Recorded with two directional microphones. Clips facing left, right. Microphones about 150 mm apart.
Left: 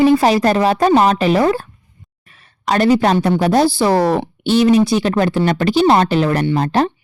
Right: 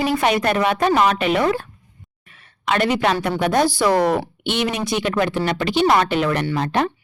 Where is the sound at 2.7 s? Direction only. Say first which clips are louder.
Left 5 dB; 35° left (ahead or behind).